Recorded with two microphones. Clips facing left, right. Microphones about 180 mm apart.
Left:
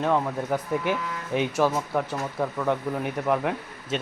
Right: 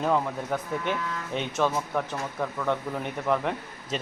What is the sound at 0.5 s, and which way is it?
A man's voice, 10° left (ahead or behind).